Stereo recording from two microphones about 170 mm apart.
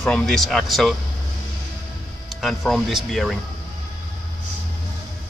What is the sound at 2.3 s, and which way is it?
Speech, centre (ahead or behind).